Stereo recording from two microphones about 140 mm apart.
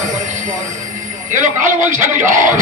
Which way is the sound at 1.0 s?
65° right (ahead or behind).